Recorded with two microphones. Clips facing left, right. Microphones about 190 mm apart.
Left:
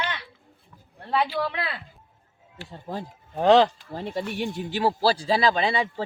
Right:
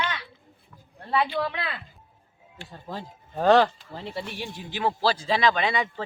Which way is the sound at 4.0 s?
45° left (ahead or behind).